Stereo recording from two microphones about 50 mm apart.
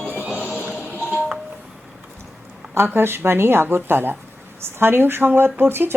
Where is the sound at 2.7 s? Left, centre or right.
Right.